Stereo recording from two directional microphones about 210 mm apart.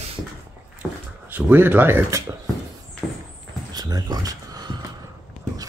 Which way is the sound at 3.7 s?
20° right (ahead or behind).